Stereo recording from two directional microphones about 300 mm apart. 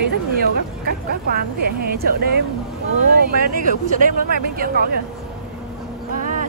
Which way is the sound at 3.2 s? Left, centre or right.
Right.